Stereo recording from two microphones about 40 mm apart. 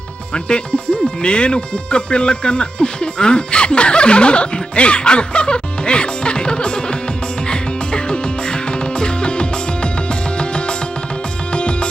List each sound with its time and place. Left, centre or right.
0.3 s speech: left
7.4 s music: left